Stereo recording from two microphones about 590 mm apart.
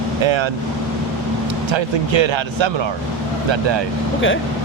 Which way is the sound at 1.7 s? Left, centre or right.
Right.